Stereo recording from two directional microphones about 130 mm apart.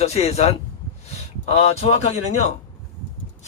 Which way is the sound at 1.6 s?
55° left (ahead or behind).